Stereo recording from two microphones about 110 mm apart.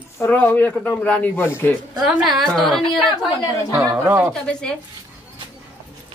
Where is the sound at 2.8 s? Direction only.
45° left (ahead or behind).